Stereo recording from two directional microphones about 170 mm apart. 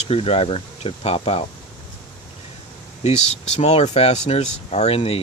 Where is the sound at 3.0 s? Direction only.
40° left (ahead or behind).